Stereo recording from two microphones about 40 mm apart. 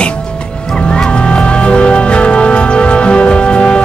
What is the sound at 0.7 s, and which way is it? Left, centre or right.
Music, left.